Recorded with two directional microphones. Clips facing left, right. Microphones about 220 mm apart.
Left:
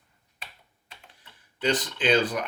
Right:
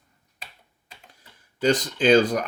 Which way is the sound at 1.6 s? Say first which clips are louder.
Right 5 dB; 40° right (ahead or behind).